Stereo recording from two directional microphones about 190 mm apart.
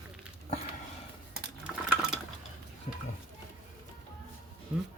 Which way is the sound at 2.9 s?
35° left (ahead or behind).